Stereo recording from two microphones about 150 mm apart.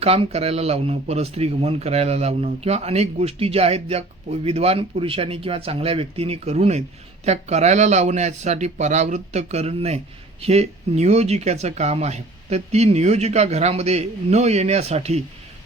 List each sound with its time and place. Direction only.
0.0 s speech: 40° right (ahead or behind)